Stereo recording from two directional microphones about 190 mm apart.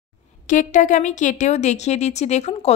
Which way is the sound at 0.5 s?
40° left (ahead or behind).